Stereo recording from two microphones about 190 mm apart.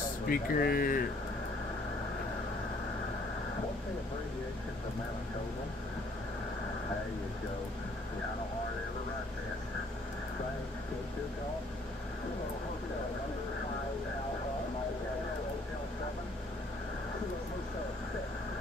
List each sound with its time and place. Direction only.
0.3 s speech: 50° left (ahead or behind)